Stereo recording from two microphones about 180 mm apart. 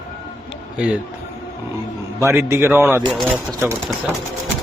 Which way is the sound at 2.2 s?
15° right (ahead or behind).